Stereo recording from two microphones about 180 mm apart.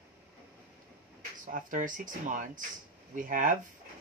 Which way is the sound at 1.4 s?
45° right (ahead or behind).